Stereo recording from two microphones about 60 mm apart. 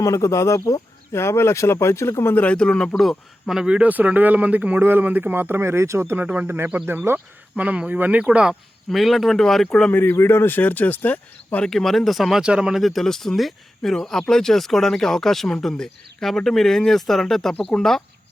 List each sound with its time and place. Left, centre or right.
0.0 s speech: left
2.4 s speech: centre
3.6 s speech: centre; by 6.1 s right
6.1 s speech: right
6.8 s speech: right
7.5 s speech: right
8.9 s speech: centre
9.9 s speech: left
11.6 s speech: centre
12.4 s speech: centre
12.8 s speech: centre